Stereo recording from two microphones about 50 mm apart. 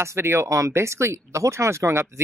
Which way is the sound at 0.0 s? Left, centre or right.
Right.